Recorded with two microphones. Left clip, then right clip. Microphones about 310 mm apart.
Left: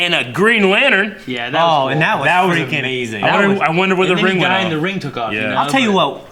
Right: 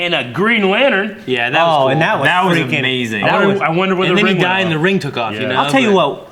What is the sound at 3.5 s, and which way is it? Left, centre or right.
Speech, right.